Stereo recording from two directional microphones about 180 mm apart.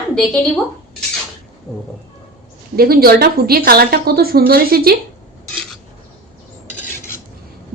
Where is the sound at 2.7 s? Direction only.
55° right (ahead or behind).